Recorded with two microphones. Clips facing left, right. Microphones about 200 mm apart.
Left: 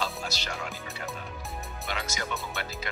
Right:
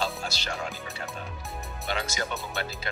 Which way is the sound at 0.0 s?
30° right (ahead or behind).